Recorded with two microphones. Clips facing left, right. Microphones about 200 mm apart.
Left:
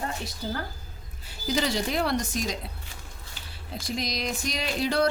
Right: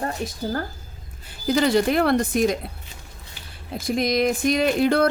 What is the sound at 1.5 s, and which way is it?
Speech, 55° right (ahead or behind).